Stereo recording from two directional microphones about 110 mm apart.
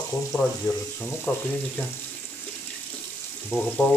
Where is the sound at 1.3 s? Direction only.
20° left (ahead or behind).